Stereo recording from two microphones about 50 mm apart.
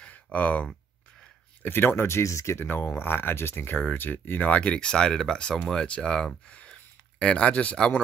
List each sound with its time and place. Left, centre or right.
0.0 s a sound: left
1.6 s speech: left
2.6 s speech: left